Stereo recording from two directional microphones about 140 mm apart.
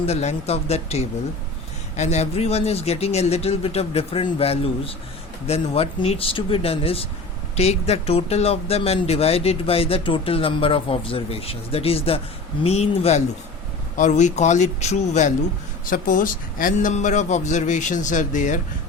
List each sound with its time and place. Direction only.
0.0 s a man's voice: 50° left (ahead or behind)
15.9 s a man's voice: 75° left (ahead or behind)